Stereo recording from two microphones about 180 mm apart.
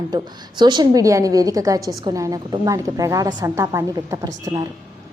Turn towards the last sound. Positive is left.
turn(degrees=-20)  # may be behind; listen again after turning